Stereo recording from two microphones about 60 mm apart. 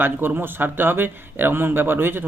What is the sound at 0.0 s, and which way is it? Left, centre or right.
Speech, right.